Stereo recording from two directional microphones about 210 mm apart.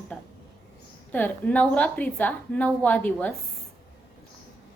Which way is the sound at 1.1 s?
5° left (ahead or behind).